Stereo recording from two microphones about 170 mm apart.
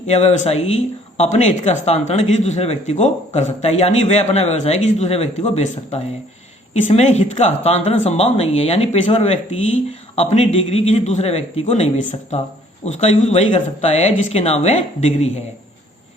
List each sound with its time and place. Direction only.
0.1 s speech: 40° left (ahead or behind)